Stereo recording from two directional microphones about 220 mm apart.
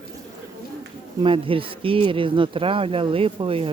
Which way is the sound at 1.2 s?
25° right (ahead or behind).